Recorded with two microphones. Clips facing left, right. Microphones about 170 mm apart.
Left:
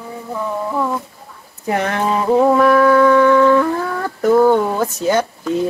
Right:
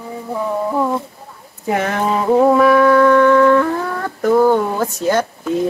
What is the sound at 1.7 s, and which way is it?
Speech, centre (ahead or behind).